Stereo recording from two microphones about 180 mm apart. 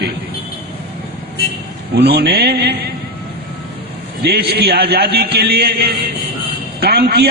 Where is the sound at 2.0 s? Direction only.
60° right (ahead or behind).